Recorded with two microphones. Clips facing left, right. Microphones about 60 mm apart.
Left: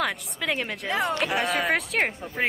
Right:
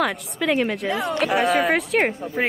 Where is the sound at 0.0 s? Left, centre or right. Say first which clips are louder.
Right 5 dB; centre.